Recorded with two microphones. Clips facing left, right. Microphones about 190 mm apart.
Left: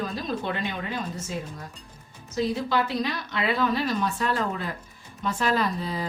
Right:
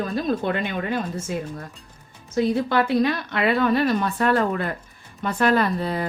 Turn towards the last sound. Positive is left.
turn(degrees=-60)  # may be behind; listen again after turning